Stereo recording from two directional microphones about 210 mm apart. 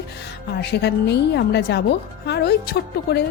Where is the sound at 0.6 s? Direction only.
50° left (ahead or behind).